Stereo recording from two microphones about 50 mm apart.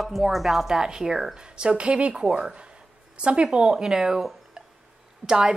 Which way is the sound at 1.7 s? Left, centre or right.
Right.